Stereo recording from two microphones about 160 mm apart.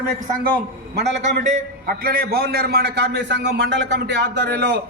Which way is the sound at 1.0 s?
50° right (ahead or behind).